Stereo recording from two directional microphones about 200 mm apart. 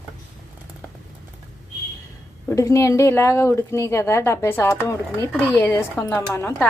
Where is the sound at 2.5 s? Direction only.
15° left (ahead or behind).